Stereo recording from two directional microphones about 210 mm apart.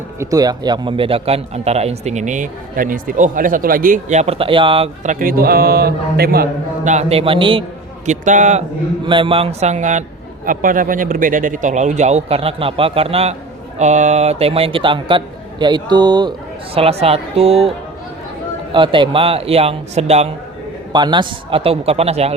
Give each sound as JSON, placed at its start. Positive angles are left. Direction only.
{"t": 0.2, "sound": "speech", "side_deg": -15}
{"t": 5.2, "sound": "a man's voice", "side_deg": -45}
{"t": 8.0, "sound": "a man's voice", "side_deg": -35}
{"t": 9.0, "sound": "a man's voice", "side_deg": -25}